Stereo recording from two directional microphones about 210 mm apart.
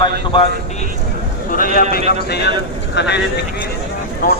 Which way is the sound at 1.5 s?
45° left (ahead or behind).